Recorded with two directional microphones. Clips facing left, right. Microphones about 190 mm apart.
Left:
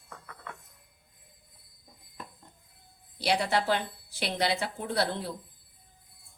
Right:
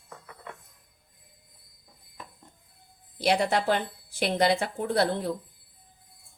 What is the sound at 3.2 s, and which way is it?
A woman's voice, 50° right (ahead or behind).